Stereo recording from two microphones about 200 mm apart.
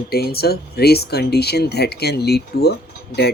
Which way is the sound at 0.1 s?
50° left (ahead or behind).